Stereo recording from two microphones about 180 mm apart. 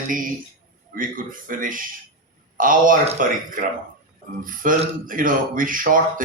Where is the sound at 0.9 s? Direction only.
50° right (ahead or behind).